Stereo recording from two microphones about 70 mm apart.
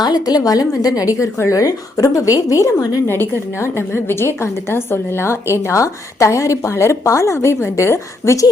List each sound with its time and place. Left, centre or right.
0.0 s a woman's voice: left
3.1 s a woman's voice: left